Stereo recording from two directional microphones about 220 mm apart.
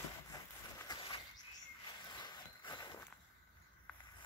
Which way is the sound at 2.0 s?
20° left (ahead or behind).